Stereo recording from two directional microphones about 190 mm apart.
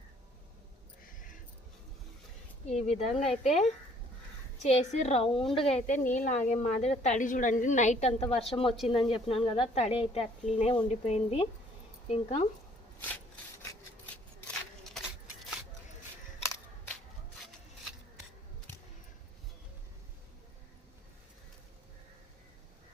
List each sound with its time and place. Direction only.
2.6 s a woman's voice: 35° left (ahead or behind)
13.0 s wood: 10° left (ahead or behind)
14.4 s a sound: centre (ahead or behind)